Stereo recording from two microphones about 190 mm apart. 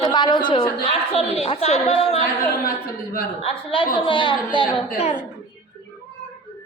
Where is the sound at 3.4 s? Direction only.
25° left (ahead or behind).